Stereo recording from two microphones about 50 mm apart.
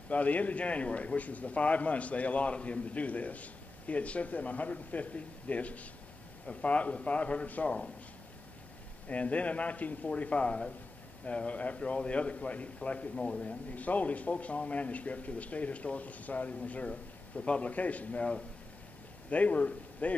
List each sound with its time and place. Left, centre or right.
0.1 s a man's voice: left
9.1 s a man's voice: left